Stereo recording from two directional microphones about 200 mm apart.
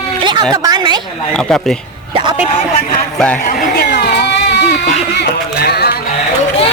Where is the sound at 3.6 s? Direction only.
50° left (ahead or behind).